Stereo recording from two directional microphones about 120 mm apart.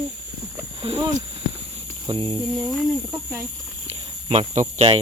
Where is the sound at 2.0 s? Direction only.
40° right (ahead or behind).